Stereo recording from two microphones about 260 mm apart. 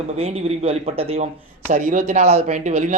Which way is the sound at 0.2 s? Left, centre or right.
Right.